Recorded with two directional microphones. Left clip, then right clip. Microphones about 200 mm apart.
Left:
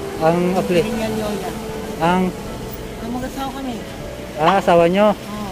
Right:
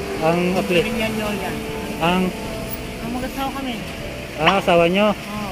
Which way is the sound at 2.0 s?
10° left (ahead or behind).